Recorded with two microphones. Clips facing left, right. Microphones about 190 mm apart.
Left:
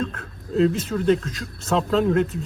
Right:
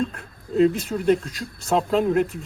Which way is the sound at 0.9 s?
20° right (ahead or behind).